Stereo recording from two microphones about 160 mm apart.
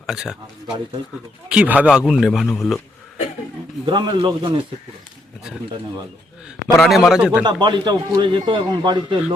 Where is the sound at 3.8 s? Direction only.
30° right (ahead or behind).